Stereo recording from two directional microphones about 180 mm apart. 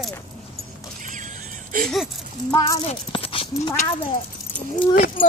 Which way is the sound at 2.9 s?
30° left (ahead or behind).